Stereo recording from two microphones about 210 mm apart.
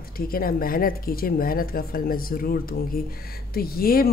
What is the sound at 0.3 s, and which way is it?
Speech, 45° left (ahead or behind).